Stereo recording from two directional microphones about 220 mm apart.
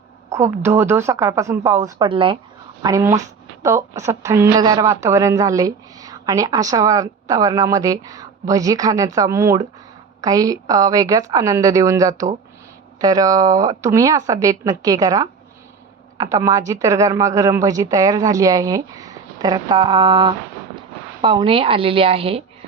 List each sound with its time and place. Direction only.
0.3 s a woman's voice: 15° right (ahead or behind)